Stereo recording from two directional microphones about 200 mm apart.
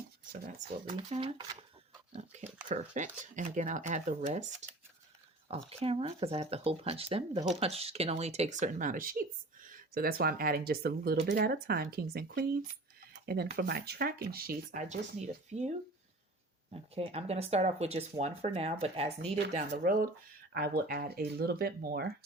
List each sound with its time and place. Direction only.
0.9 s speech: 25° right (ahead or behind)
5.6 s speech: 30° right (ahead or behind)
16.7 s speech: 30° right (ahead or behind); by 22.1 s 50° right (ahead or behind)